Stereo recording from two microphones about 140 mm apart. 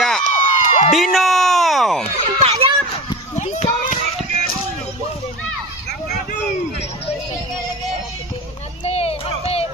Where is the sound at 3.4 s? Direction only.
55° left (ahead or behind).